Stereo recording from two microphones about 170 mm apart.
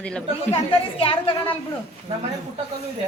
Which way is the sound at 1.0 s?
30° left (ahead or behind).